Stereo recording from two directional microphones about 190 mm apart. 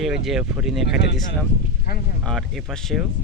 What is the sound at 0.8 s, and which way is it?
Speech, 60° left (ahead or behind).